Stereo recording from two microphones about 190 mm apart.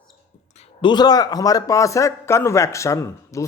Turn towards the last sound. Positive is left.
turn(degrees=15)  # may be behind; listen again after turning